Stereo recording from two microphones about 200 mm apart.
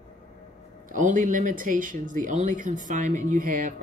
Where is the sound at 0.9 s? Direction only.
40° right (ahead or behind).